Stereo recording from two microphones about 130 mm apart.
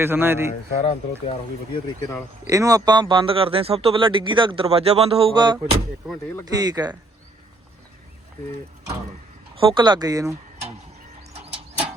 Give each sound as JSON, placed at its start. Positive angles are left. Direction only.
{"t": 0.0, "sound": "a man's voice", "side_deg": -15}
{"t": 0.8, "sound": "speech", "side_deg": 45}
{"t": 2.5, "sound": "speech", "side_deg": -25}
{"t": 9.6, "sound": "speech", "side_deg": -35}